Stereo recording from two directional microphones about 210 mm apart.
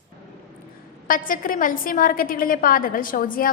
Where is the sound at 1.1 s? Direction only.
40° left (ahead or behind).